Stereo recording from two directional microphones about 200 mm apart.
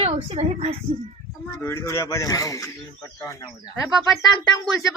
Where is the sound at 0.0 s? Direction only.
30° right (ahead or behind).